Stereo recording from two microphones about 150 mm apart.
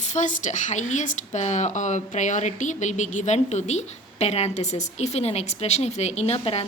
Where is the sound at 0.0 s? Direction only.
55° left (ahead or behind).